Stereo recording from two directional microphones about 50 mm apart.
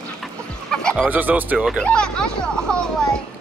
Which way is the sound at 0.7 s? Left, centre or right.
Centre.